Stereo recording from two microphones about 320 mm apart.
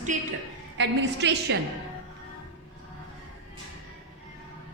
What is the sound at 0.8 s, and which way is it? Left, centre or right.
Speech, right.